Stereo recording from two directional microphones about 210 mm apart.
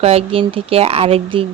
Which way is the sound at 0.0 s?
30° right (ahead or behind).